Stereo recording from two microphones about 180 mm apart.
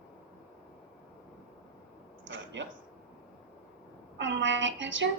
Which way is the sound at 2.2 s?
90° right.